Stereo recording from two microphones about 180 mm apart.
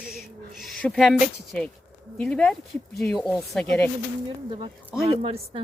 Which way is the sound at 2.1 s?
5° left (ahead or behind).